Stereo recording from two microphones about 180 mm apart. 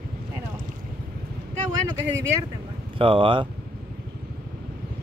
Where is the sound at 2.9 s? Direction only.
30° right (ahead or behind).